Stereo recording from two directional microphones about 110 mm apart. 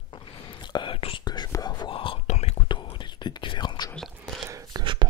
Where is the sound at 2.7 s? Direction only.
45° left (ahead or behind).